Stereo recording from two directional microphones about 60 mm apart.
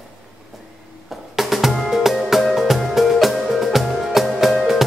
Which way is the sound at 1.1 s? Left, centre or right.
Centre.